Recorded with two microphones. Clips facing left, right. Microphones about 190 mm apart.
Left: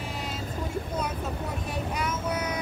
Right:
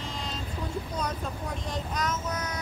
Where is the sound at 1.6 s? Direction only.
10° left (ahead or behind).